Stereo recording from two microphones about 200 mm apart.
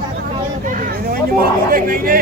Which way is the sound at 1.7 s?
45° right (ahead or behind).